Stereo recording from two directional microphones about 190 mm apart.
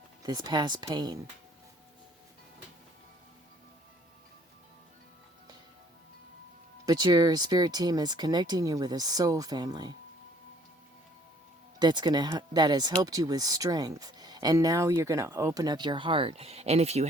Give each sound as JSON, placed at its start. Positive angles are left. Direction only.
{"t": 0.2, "sound": "speech", "side_deg": -20}
{"t": 6.8, "sound": "speech", "side_deg": -20}
{"t": 11.8, "sound": "speech", "side_deg": -25}